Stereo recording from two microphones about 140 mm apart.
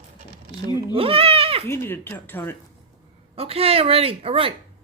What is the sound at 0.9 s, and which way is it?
Goat, 40° right (ahead or behind).